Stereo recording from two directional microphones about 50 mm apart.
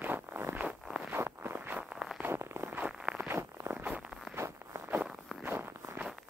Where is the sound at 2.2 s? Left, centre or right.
Right.